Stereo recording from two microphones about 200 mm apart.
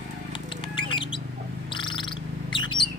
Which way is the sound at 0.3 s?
25° left (ahead or behind).